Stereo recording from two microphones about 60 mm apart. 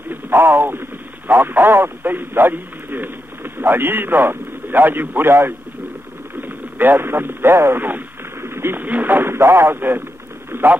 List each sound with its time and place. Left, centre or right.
0.1 s speech: right
6.4 s radio: right
8.8 s speech: right
10.5 s radio: right